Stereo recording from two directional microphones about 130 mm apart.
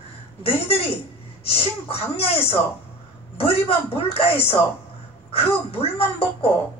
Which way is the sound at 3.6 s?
50° left (ahead or behind).